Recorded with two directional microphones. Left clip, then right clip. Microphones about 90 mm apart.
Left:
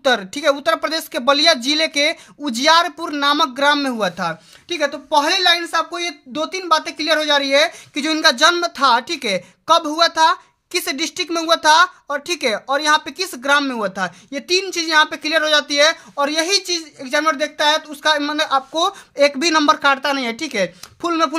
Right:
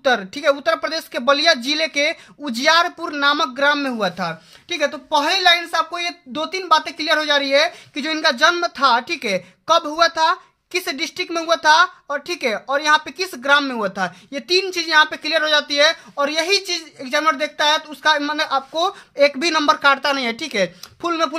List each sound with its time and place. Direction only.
0.0 s a woman's voice: 35° left (ahead or behind); by 7.7 s 20° left (ahead or behind)
7.9 s a woman's voice: 40° left (ahead or behind); by 21.4 s 25° left (ahead or behind)